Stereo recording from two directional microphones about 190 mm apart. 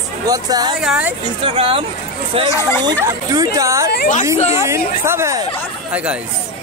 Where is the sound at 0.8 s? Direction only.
5° right (ahead or behind).